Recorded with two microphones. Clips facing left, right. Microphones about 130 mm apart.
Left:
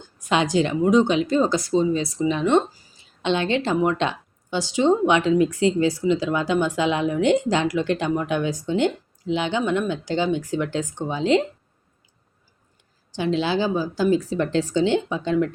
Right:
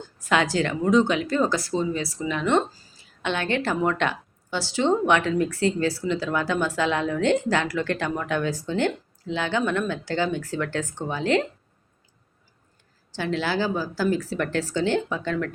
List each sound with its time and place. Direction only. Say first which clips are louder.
0.2 s speech: left 2 dB; 20° left (ahead or behind)
13.1 s speech: left 4 dB; 20° left (ahead or behind)